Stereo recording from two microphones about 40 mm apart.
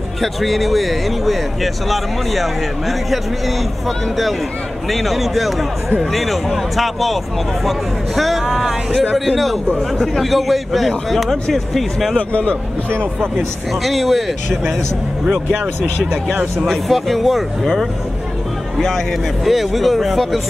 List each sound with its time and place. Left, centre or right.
0.2 s speech: centre
12.2 s speech: left
13.8 s speech: centre
15.2 s speech: right
16.6 s speech: centre
18.8 s speech: centre